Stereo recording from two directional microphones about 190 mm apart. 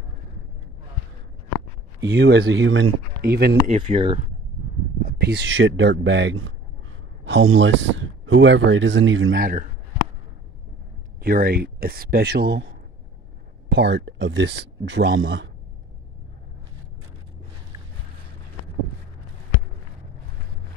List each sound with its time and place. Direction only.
2.0 s speech: 60° right (ahead or behind); by 2.9 s 85° right
3.2 s speech: 55° right (ahead or behind)
3.6 s speech: 30° right (ahead or behind)
5.0 s speech: 55° right (ahead or behind); by 9.4 s 85° right
9.4 s speech: 45° right (ahead or behind)
11.1 s speech: 50° right (ahead or behind); by 15.5 s 70° right (ahead or behind)